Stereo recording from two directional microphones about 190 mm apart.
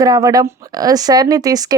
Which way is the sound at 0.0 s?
20° right (ahead or behind).